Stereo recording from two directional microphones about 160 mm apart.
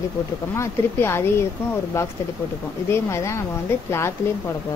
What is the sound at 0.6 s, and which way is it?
Speech, 15° left (ahead or behind).